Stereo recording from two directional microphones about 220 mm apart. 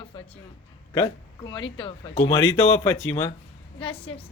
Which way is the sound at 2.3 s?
10° left (ahead or behind).